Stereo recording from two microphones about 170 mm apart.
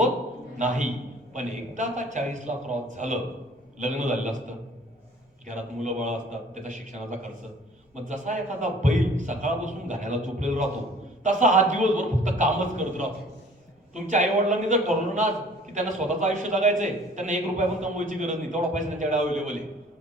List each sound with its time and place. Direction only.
1.3 s a man's voice: 45° right (ahead or behind)
5.5 s a man's voice: 45° right (ahead or behind)